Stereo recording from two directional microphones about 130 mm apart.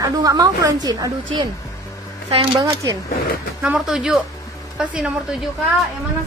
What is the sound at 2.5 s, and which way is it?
Speech, 30° right (ahead or behind).